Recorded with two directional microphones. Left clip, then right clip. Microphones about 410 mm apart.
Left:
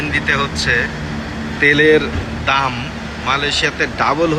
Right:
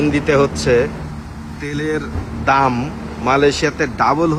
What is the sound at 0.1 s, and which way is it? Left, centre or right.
Speech, centre.